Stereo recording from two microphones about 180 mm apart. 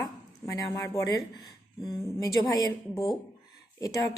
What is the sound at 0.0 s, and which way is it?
A woman's voice, 20° left (ahead or behind).